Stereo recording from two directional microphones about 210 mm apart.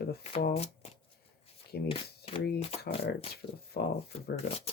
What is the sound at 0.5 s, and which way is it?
Speech, 30° left (ahead or behind).